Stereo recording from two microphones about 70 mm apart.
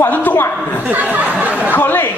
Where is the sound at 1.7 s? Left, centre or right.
Left.